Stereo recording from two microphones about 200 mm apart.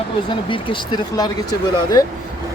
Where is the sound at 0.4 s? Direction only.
25° left (ahead or behind).